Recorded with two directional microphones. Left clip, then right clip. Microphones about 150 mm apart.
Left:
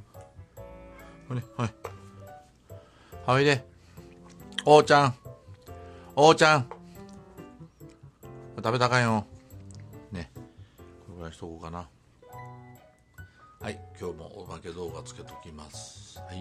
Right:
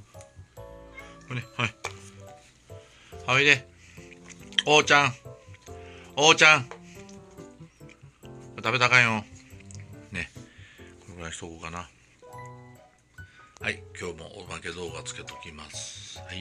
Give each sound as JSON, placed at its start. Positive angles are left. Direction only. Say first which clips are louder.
{"t": 1.3, "sound": "speech", "louder": "right 5 dB", "side_deg": 35}
{"t": 3.3, "sound": "music", "louder": "right 3 dB", "side_deg": 50}
{"t": 4.5, "sound": "speech", "louder": "left 2 dB", "side_deg": 50}
{"t": 5.9, "sound": "music", "louder": "left 1 dB", "side_deg": 50}
{"t": 8.5, "sound": "speech", "louder": "right 4 dB", "side_deg": 45}
{"t": 9.7, "sound": "music", "louder": "right 2 dB", "side_deg": 30}
{"t": 11.1, "sound": "a sound", "louder": "right 3 dB", "side_deg": 15}
{"t": 11.5, "sound": "speech", "louder": "right 2 dB", "side_deg": 25}
{"t": 13.6, "sound": "music", "louder": "right 7 dB", "side_deg": 30}
{"t": 13.9, "sound": "speech", "louder": "right 1 dB", "side_deg": 15}